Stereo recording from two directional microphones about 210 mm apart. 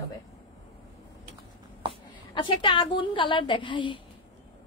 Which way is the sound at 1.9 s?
25° left (ahead or behind).